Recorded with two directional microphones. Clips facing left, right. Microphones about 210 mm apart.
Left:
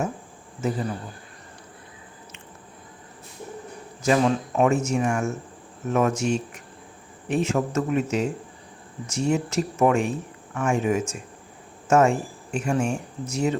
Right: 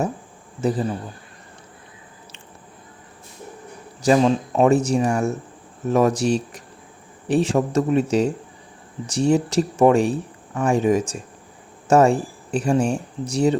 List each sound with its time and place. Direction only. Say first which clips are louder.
0.6 s speech: right 5 dB; 35° right (ahead or behind)
4.0 s speech: right 4 dB; 30° right (ahead or behind)
9.0 s speech: right 5 dB; 35° right (ahead or behind)